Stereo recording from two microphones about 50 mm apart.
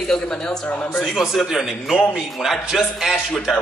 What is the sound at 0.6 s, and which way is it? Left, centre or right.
Speech, left.